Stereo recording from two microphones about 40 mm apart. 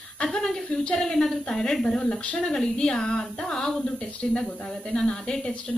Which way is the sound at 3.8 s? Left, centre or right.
Left.